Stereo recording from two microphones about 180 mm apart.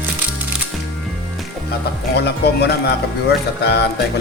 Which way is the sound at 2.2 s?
65° left (ahead or behind).